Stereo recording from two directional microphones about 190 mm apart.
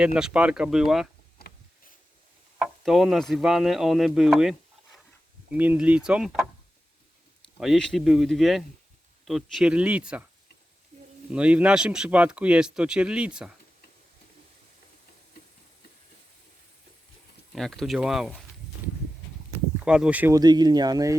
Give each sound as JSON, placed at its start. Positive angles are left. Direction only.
{"t": 0.0, "sound": "speech", "side_deg": -5}
{"t": 1.4, "sound": "a sound", "side_deg": 50}
{"t": 2.6, "sound": "speech", "side_deg": 0}
{"t": 7.6, "sound": "speech", "side_deg": 0}
{"t": 10.9, "sound": "snake", "side_deg": -35}
{"t": 11.3, "sound": "speech", "side_deg": -5}
{"t": 17.5, "sound": "speech", "side_deg": 0}
{"t": 19.8, "sound": "speech", "side_deg": -5}
{"t": 20.4, "sound": "speech", "side_deg": -20}